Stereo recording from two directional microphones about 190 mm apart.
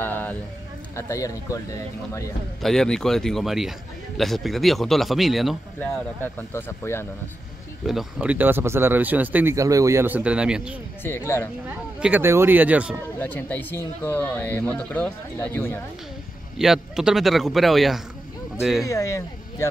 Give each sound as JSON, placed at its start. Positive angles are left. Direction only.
{"t": 0.0, "sound": "a sound", "side_deg": 10}
{"t": 0.9, "sound": "speech", "side_deg": 15}
{"t": 2.6, "sound": "a man's voice", "side_deg": 5}
{"t": 5.8, "sound": "speech", "side_deg": 10}
{"t": 7.8, "sound": "speech", "side_deg": 0}
{"t": 11.1, "sound": "speech", "side_deg": 10}
{"t": 11.6, "sound": "speech", "side_deg": -10}
{"t": 13.2, "sound": "speech", "side_deg": 10}
{"t": 16.5, "sound": "a man's voice", "side_deg": 0}
{"t": 18.9, "sound": "speech", "side_deg": 15}